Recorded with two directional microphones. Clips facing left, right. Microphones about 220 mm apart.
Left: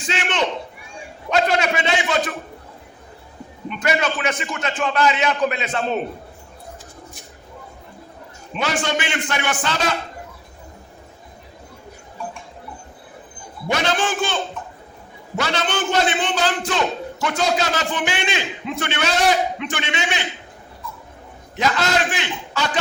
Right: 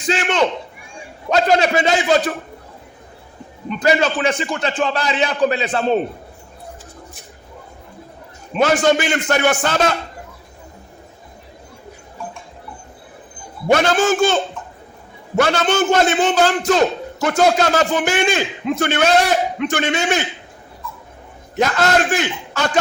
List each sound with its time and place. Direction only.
0.1 s a sound: 40° right (ahead or behind)
1.3 s a man's voice: 35° right (ahead or behind)
3.7 s a man's voice: 35° right (ahead or behind)
8.5 s a man's voice: 45° right (ahead or behind)
13.7 s a man's voice: 45° right (ahead or behind)
15.4 s a man's voice: 50° right (ahead or behind)
21.5 s a man's voice: 50° right (ahead or behind)